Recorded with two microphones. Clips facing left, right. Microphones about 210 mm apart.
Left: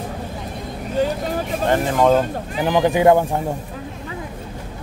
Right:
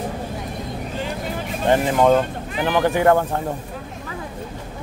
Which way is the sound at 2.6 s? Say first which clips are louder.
Left 2 dB; 15° left (ahead or behind).